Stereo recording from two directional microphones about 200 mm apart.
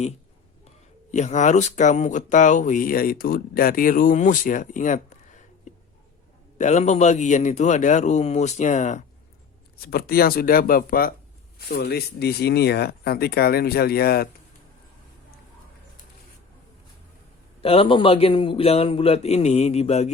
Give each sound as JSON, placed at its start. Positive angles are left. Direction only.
{"t": 1.1, "sound": "speech", "side_deg": 35}
{"t": 9.8, "sound": "speech", "side_deg": 50}
{"t": 17.6, "sound": "a man's voice", "side_deg": 30}